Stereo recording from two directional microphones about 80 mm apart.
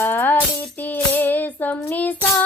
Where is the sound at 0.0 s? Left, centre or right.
Left.